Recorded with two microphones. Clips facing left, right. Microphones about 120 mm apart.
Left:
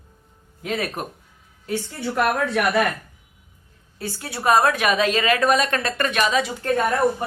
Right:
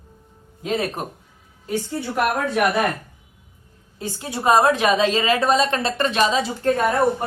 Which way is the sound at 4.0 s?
20° right (ahead or behind).